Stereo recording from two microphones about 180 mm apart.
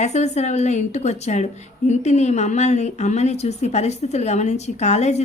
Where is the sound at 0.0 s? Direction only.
40° left (ahead or behind).